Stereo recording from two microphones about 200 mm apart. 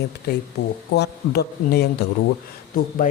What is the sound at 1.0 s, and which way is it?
A man's voice, 55° left (ahead or behind).